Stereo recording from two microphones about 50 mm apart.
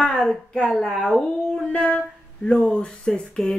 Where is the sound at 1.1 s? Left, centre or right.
Centre.